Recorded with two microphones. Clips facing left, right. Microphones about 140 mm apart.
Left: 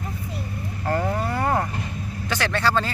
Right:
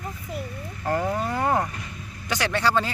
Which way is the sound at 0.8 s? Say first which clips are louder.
Left 1 dB; 15° right (ahead or behind).